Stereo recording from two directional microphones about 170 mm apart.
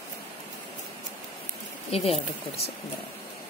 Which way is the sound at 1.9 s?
35° left (ahead or behind).